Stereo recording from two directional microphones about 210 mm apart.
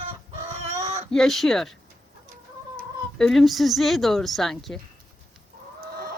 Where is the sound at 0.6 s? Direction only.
30° right (ahead or behind).